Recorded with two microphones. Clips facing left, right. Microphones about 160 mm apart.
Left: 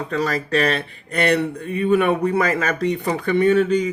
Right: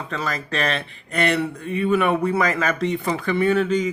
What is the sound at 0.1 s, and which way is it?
Speech, 35° left (ahead or behind).